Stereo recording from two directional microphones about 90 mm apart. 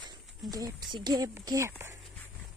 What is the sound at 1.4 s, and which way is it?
Speech, 45° right (ahead or behind).